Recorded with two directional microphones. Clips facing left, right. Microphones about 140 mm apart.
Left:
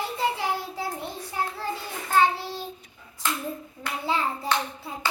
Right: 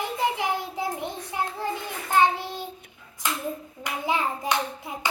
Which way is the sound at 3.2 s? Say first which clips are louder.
Even; 15° right (ahead or behind).